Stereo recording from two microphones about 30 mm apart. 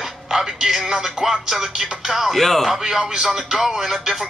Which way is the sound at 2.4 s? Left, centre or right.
Centre.